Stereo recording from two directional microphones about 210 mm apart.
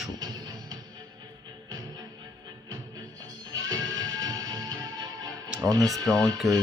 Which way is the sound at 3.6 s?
20° right (ahead or behind).